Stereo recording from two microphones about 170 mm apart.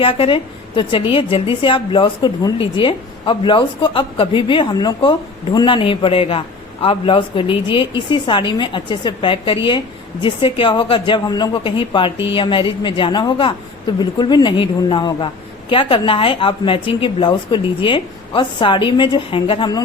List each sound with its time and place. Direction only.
0.0 s a woman's voice: 30° left (ahead or behind)